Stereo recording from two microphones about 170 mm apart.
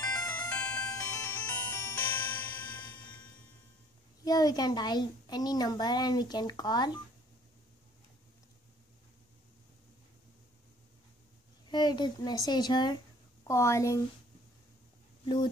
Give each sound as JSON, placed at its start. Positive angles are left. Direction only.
{"t": 0.1, "sound": "music", "side_deg": 20}
{"t": 0.5, "sound": "music", "side_deg": 10}
{"t": 4.2, "sound": "speech", "side_deg": 20}
{"t": 11.7, "sound": "speech", "side_deg": 25}
{"t": 15.2, "sound": "speech", "side_deg": 25}